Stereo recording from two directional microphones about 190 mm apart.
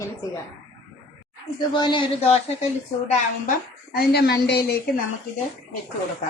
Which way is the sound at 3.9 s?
55° left (ahead or behind).